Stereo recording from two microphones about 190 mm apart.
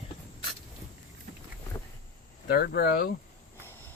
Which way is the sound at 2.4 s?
55° left (ahead or behind).